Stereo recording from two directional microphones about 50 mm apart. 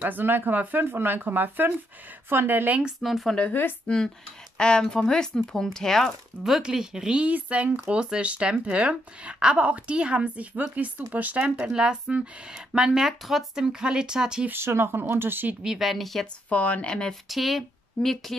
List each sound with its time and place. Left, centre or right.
0.0 s speech: right
3.0 s a woman's voice: centre
3.8 s speech: centre
6.6 s speech: centre
7.2 s speech: right
11.7 s speech: centre
14.5 s speech: right
15.8 s a woman's voice: centre
16.4 s speech: left
16.8 s speech: centre
17.3 s speech: centre